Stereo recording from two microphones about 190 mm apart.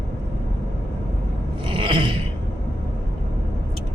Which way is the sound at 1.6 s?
25° right (ahead or behind).